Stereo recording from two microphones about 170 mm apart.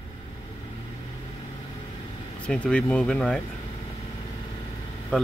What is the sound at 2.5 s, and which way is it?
Speech, 5° left (ahead or behind).